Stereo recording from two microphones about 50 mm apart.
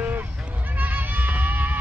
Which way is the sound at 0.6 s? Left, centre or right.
Right.